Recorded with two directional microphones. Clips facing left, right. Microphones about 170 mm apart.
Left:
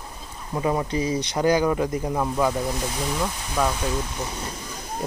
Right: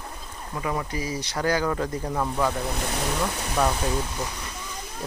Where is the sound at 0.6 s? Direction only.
25° left (ahead or behind); by 2.5 s 10° left (ahead or behind).